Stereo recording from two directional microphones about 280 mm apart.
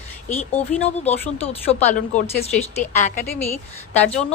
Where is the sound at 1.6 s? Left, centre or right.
Left.